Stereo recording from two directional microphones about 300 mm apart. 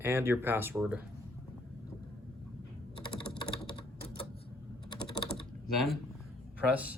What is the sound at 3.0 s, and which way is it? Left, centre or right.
Typing, centre.